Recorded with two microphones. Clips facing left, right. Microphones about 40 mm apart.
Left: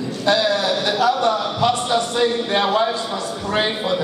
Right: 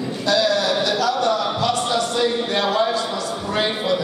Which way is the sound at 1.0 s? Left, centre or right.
Left.